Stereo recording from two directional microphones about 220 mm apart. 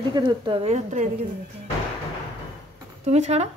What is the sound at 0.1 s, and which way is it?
A woman's voice, 20° right (ahead or behind).